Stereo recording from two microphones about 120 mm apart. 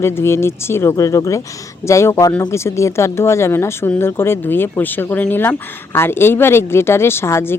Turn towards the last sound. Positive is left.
turn(degrees=20)  # may be behind; listen again after turning